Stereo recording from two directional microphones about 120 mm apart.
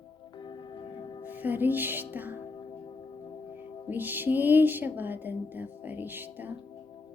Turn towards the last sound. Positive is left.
turn(degrees=-15)  # may be behind; listen again after turning